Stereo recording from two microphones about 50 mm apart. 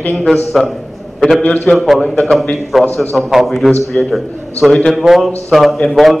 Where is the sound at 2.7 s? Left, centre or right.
Centre.